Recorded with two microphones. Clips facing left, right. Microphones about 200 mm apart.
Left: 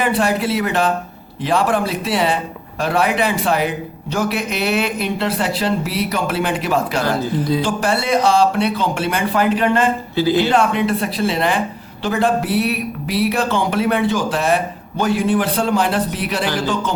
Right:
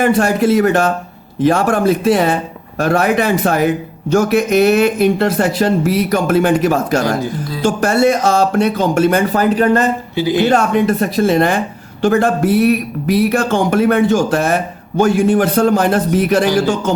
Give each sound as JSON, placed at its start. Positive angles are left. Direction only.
{"t": 0.0, "sound": "speech", "side_deg": -45}
{"t": 10.2, "sound": "speech", "side_deg": -15}
{"t": 10.4, "sound": "speech", "side_deg": -45}